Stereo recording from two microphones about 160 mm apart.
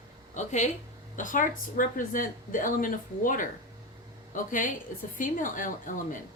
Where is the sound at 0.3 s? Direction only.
45° left (ahead or behind).